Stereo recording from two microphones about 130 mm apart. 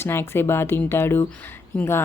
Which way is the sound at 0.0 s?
20° left (ahead or behind).